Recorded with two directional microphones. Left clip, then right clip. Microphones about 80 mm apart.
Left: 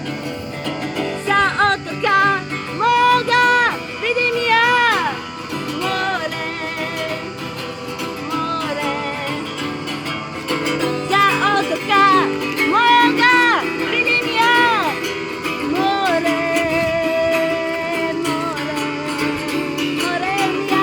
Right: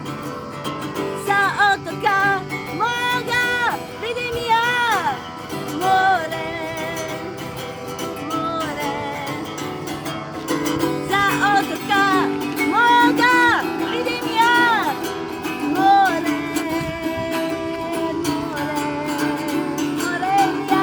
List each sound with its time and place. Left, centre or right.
1.3 s music: right
10.5 s music: right
11.1 s music: right
12.2 s music: right
12.7 s music: right
13.6 s music: right
13.9 s music: right
16.2 s music: right
18.8 s music: right